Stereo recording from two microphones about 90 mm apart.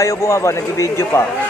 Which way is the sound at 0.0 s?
35° left (ahead or behind).